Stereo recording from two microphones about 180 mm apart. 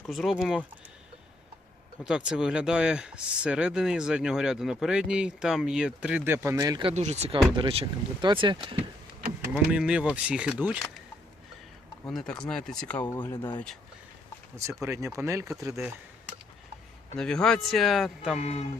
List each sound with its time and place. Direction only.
0.0 s speech: centre (ahead or behind)
2.0 s speech: 5° right (ahead or behind); by 6.9 s 25° right (ahead or behind)
6.9 s speech: 40° right (ahead or behind)
9.7 s speech: 5° right (ahead or behind)
12.0 s speech: 5° left (ahead or behind)
13.3 s speech: 25° left (ahead or behind)
14.5 s speech: 15° right (ahead or behind)
17.2 s speech: 5° left (ahead or behind)